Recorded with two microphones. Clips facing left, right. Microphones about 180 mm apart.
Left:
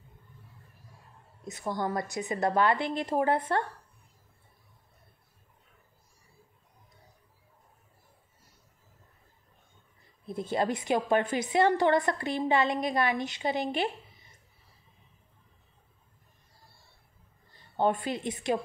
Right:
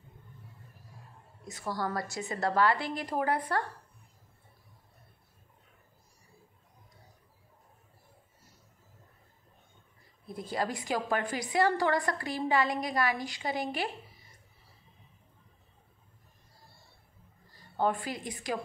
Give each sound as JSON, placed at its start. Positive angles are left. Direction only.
{"t": 1.4, "sound": "a woman's voice", "side_deg": 20}
{"t": 10.2, "sound": "a woman's voice", "side_deg": 25}
{"t": 17.5, "sound": "a woman's voice", "side_deg": 25}